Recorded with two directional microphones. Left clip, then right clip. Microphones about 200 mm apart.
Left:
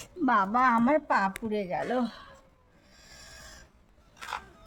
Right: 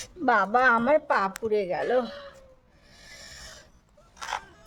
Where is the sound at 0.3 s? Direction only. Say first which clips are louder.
Right 3 dB; 45° right (ahead or behind).